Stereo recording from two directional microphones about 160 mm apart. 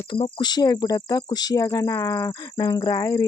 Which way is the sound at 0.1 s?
30° left (ahead or behind).